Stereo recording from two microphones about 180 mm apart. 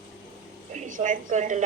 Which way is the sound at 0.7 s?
45° right (ahead or behind).